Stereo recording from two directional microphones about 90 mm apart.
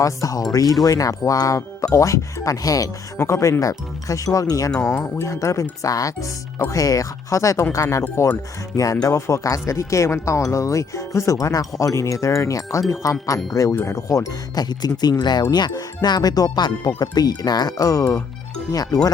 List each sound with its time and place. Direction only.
0.0 s speech: 40° left (ahead or behind)